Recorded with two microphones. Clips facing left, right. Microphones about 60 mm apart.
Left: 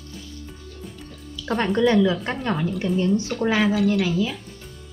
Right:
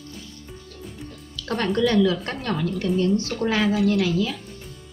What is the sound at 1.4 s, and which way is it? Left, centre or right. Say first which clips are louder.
A woman's voice: left 2 dB; centre.